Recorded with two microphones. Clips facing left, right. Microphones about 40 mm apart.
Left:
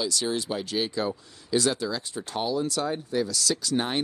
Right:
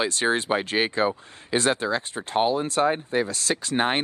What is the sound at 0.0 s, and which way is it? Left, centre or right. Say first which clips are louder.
Speech: right 5 dB; right.